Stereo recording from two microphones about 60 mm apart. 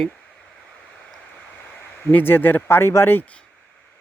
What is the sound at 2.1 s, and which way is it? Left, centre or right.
Speech, left.